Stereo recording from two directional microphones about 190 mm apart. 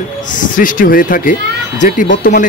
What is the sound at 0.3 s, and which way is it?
Speech, 45° left (ahead or behind).